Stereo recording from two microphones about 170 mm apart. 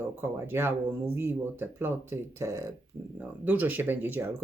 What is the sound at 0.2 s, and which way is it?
Speech, 15° right (ahead or behind).